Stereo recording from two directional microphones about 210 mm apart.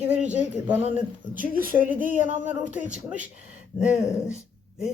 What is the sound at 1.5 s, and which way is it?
Speech, 45° right (ahead or behind).